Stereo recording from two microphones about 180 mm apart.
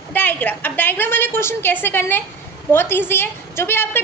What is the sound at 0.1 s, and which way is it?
A woman's voice, 10° left (ahead or behind).